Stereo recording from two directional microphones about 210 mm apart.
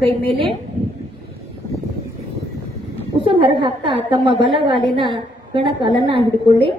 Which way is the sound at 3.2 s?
25° right (ahead or behind).